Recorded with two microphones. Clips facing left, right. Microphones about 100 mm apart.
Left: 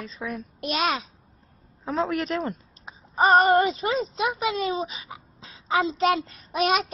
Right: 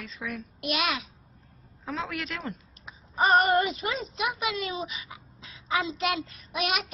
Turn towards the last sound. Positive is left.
turn(degrees=35)  # may be behind; listen again after turning